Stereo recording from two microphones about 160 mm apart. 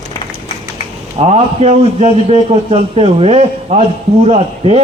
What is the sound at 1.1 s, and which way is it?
A man's voice, 40° right (ahead or behind).